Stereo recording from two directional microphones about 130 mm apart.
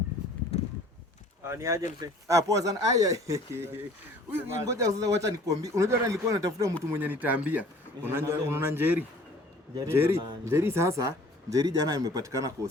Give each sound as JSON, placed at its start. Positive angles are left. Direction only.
{"t": 1.5, "sound": "a man's voice", "side_deg": -25}